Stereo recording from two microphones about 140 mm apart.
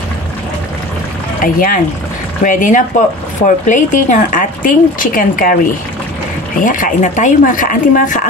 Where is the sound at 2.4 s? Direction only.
70° left (ahead or behind); by 5.5 s 85° left.